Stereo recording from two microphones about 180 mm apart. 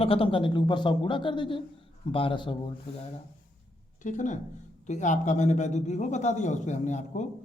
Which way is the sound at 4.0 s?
45° left (ahead or behind).